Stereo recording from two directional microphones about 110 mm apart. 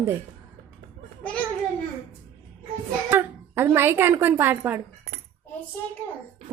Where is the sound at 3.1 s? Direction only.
20° right (ahead or behind).